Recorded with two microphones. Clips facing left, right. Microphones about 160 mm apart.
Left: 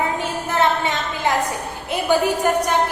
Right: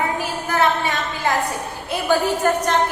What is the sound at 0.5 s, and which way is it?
A woman's voice, 20° left (ahead or behind).